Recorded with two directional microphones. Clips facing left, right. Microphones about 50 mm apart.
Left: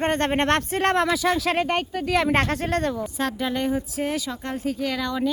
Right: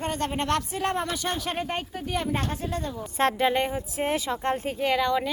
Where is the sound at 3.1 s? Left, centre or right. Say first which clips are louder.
Right 3 dB; right.